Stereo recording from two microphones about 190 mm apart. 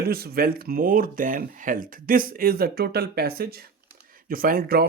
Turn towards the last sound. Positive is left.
turn(degrees=-50)  # may be behind; listen again after turning